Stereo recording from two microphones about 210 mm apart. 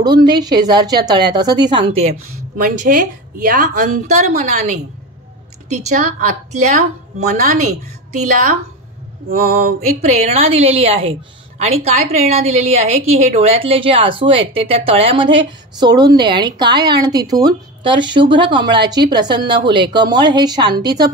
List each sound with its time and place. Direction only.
0.0 s speech: 20° right (ahead or behind)
2.5 s a woman's voice: 40° right (ahead or behind)
6.7 s a woman's voice: 30° right (ahead or behind)
9.3 s mantra: 45° right (ahead or behind)
10.0 s speech: 30° right (ahead or behind)